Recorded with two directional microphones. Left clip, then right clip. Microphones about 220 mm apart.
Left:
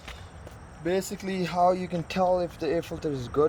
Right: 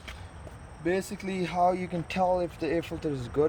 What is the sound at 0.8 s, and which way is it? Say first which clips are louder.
Speech: left 1 dB; 35° left (ahead or behind).